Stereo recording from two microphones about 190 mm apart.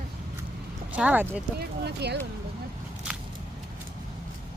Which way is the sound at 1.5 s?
60° right (ahead or behind).